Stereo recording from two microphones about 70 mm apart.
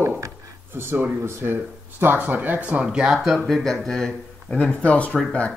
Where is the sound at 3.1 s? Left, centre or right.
Centre.